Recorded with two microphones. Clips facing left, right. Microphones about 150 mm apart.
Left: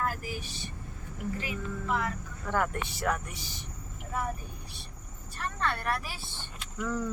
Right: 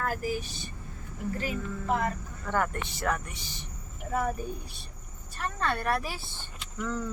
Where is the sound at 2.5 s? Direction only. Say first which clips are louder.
Right 1 dB; 5° left (ahead or behind).